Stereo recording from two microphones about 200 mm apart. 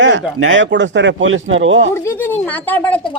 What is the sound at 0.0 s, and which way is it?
Speech, 75° right (ahead or behind).